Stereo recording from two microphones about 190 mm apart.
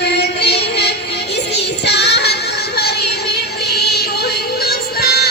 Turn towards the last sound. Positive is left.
turn(degrees=55)  # may be behind; listen again after turning